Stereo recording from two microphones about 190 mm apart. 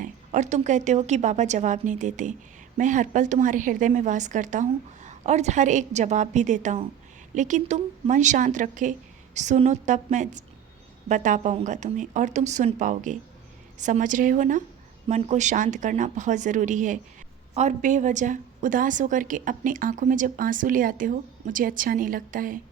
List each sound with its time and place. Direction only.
0.0 s a woman's voice: 40° right (ahead or behind)